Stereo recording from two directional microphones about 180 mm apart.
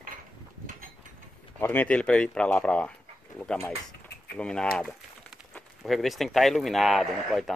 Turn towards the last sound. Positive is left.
turn(degrees=0)  # may be behind; listen again after turning